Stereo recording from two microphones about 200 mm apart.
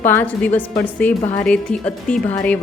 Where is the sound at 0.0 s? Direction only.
10° left (ahead or behind).